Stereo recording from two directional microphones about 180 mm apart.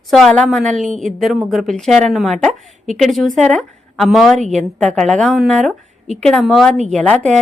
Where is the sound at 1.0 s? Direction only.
Centre (ahead or behind).